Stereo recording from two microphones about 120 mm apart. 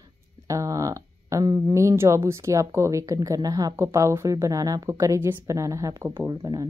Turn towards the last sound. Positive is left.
turn(degrees=-30)  # may be behind; listen again after turning